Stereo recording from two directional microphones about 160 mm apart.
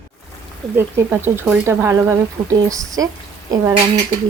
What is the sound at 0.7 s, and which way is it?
A woman's voice, 15° right (ahead or behind).